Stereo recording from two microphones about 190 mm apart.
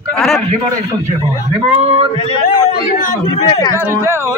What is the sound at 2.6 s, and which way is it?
Speech, 40° left (ahead or behind).